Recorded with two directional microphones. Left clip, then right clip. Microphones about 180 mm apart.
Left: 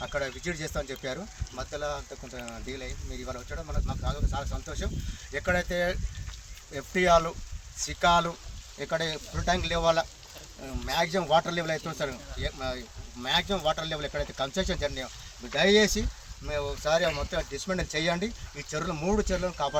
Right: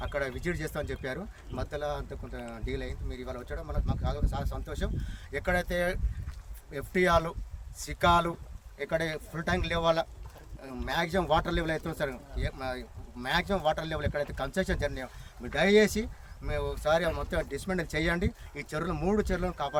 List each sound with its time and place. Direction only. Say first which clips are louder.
0.0 s speech: left 1 dB; 10° right (ahead or behind)
5.3 s speech: left 2 dB; 15° right (ahead or behind)